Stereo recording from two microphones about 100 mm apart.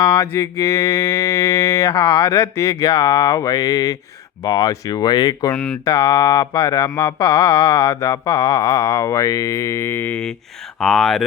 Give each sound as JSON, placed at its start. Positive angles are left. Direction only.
{"t": 0.0, "sound": "mantra", "side_deg": 40}
{"t": 10.8, "sound": "speech", "side_deg": 5}